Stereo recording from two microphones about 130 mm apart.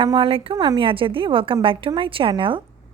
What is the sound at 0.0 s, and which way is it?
A woman's voice, 40° right (ahead or behind).